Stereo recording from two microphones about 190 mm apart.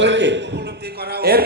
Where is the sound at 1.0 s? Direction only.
55° right (ahead or behind).